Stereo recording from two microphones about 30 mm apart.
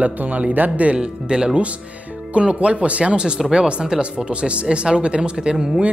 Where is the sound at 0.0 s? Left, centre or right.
Right.